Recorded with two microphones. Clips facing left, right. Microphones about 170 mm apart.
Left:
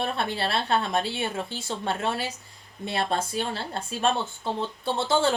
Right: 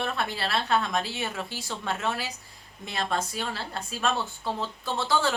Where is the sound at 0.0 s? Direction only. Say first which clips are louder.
Left 2 dB; 25° left (ahead or behind).